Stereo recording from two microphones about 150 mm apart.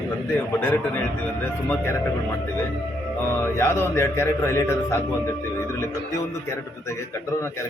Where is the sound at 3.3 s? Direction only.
15° left (ahead or behind).